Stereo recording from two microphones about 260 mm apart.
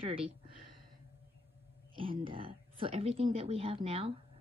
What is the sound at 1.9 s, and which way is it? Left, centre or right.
Speech, centre.